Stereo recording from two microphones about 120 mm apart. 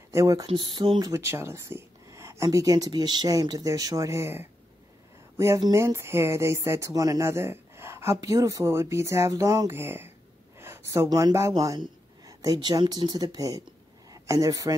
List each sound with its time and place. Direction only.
0.1 s speech: 30° right (ahead or behind)
0.5 s speech: 40° right (ahead or behind)
1.1 s speech: 20° right (ahead or behind)